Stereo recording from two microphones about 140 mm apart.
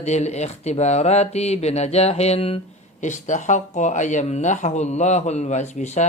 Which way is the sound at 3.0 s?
60° left (ahead or behind).